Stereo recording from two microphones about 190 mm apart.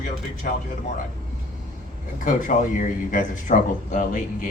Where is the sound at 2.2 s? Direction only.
45° left (ahead or behind).